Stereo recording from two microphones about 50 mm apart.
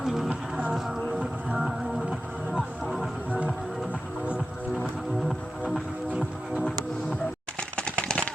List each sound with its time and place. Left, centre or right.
0.0 s music: centre
1.5 s music: centre
7.8 s a sound: centre